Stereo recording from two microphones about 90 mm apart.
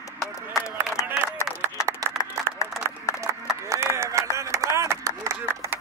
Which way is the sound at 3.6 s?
30° right (ahead or behind).